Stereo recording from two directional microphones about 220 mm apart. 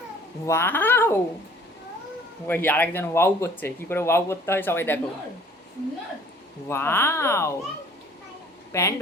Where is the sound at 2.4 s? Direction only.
10° left (ahead or behind).